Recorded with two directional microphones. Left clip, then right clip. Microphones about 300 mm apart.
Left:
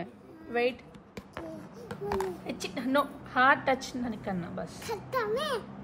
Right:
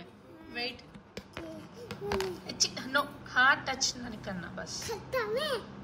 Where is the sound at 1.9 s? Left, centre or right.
Centre.